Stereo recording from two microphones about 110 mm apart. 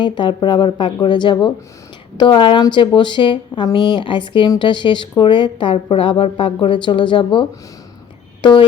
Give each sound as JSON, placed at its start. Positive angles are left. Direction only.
{"t": 0.0, "sound": "speech", "side_deg": 45}